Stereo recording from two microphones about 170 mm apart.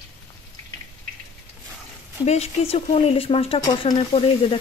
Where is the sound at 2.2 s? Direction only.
40° left (ahead or behind).